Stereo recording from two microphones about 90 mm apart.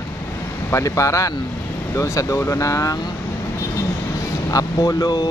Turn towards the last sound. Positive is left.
turn(degrees=45)  # may be behind; listen again after turning